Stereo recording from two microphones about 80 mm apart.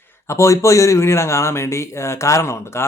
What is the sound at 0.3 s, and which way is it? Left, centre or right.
Speech, left.